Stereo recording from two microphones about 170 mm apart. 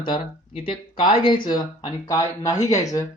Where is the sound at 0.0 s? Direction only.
30° left (ahead or behind).